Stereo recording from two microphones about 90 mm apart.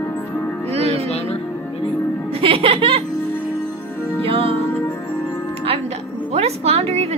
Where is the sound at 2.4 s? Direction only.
90° right.